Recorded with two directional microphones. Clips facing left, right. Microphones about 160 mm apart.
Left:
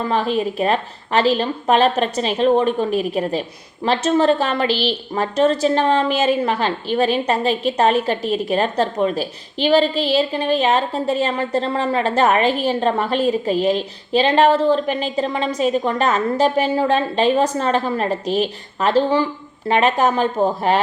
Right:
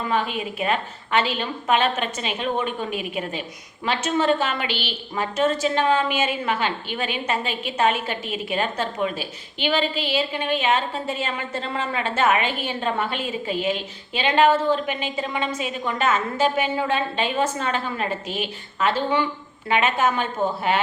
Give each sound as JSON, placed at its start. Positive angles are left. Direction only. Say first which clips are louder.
{"t": 0.0, "sound": "a woman's voice", "louder": "left 6 dB", "side_deg": 35}